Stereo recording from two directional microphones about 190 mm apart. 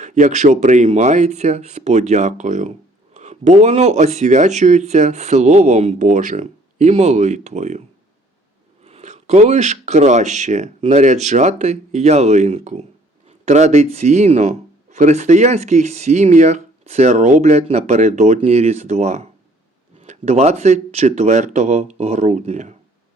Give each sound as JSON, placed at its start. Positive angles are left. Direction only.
{"t": 0.0, "sound": "speech", "side_deg": -40}